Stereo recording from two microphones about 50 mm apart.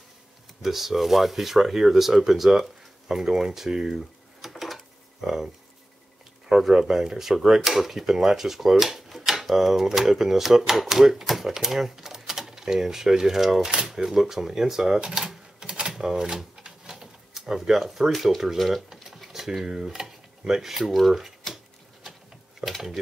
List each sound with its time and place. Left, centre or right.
0.6 s speech: centre
6.5 s speech: centre
15.0 s cash register: centre
15.9 s speech: centre
16.9 s a sound: centre
18.1 s speech: centre
22.6 s mechanisms: centre